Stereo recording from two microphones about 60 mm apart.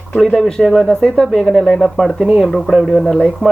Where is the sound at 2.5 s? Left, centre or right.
Centre.